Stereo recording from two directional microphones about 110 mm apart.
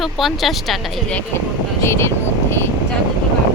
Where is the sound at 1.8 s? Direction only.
25° left (ahead or behind).